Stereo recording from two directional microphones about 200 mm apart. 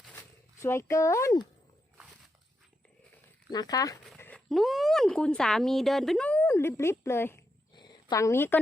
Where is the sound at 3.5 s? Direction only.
20° left (ahead or behind).